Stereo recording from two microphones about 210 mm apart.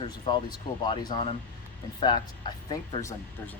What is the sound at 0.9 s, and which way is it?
Speech, 20° left (ahead or behind).